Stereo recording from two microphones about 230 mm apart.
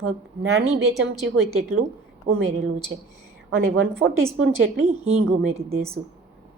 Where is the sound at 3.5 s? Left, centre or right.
Right.